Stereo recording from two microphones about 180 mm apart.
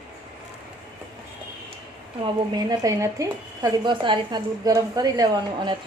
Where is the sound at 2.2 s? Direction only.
20° right (ahead or behind).